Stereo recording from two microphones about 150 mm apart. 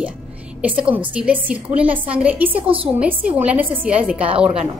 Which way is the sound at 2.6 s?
35° right (ahead or behind).